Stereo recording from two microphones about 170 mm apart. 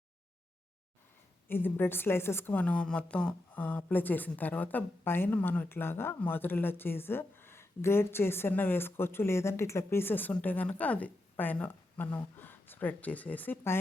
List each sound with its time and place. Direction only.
1.5 s a woman's voice: 10° left (ahead or behind)